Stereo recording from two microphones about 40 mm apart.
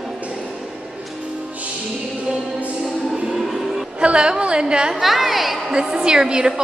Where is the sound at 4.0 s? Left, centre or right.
Right.